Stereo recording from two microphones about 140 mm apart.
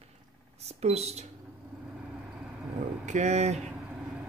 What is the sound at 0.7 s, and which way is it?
Speech, 50° right (ahead or behind).